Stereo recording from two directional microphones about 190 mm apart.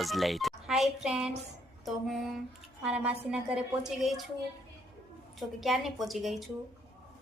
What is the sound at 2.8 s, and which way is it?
Speech, 5° right (ahead or behind).